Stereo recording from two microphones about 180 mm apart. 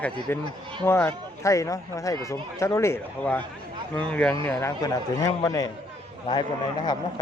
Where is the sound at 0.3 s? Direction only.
10° left (ahead or behind).